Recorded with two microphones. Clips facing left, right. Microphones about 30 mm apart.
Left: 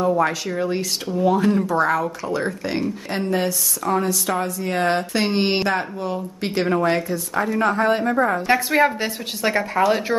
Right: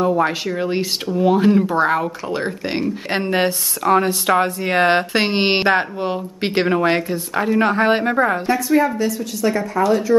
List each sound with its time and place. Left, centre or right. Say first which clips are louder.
0.2 s a woman's voice: right 2 dB; right
3.1 s a woman's voice: right 4 dB; right
8.5 s a woman's voice: right 1 dB; left